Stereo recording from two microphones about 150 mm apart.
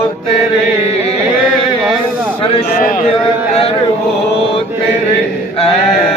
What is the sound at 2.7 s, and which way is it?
Speech, 70° left (ahead or behind).